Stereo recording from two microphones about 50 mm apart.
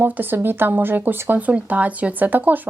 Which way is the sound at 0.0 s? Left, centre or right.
Right.